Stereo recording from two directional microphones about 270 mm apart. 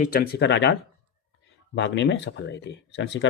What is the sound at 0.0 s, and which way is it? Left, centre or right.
Speech, left.